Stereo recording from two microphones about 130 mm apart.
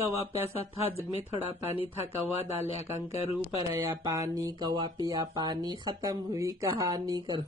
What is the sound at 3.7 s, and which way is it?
Speech, 25° right (ahead or behind).